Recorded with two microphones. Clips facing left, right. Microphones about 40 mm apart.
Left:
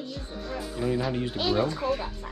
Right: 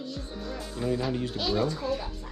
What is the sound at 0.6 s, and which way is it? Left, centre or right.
Speech, centre.